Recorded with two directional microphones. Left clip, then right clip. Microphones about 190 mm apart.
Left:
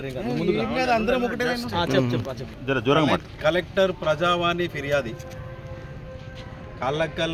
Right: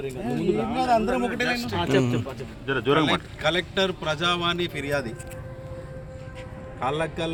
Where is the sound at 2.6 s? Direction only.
65° left (ahead or behind).